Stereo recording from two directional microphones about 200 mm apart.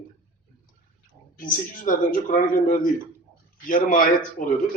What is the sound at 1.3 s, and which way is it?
A man's voice, 45° left (ahead or behind).